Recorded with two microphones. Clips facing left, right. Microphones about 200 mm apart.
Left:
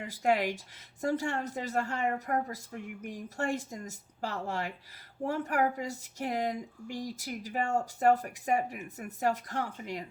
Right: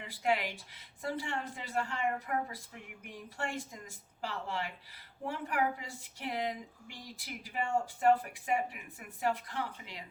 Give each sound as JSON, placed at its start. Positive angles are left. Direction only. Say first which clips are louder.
{"t": 0.1, "sound": "speech", "louder": "left 4 dB", "side_deg": 45}